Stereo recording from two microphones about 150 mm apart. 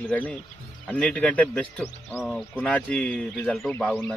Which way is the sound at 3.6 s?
15° left (ahead or behind).